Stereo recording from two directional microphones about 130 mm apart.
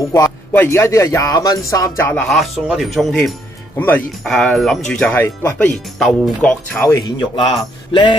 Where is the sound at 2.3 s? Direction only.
Centre (ahead or behind).